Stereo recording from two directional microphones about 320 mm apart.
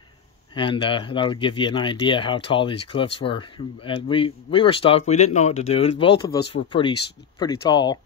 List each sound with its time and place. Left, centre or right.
0.6 s speech: centre